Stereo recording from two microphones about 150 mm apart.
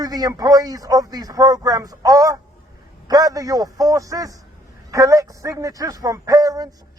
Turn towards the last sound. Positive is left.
turn(degrees=-25)  # may be behind; listen again after turning